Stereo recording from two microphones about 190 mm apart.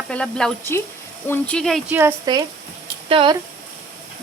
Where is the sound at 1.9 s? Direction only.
10° right (ahead or behind).